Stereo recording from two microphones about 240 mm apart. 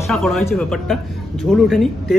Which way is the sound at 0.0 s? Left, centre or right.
Centre.